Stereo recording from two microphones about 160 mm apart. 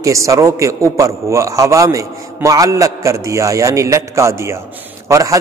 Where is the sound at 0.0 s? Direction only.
20° right (ahead or behind).